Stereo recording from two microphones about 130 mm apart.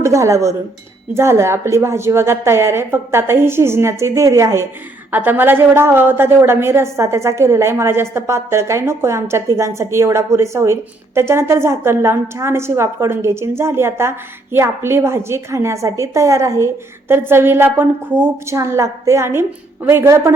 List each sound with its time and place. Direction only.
0.0 s a woman's voice: 25° right (ahead or behind)